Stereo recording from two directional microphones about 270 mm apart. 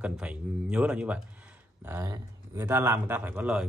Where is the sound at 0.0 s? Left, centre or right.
Centre.